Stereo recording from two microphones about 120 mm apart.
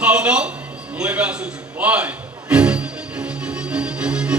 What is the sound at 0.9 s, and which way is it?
Music, 10° right (ahead or behind).